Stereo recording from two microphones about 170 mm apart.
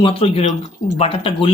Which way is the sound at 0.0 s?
35° left (ahead or behind).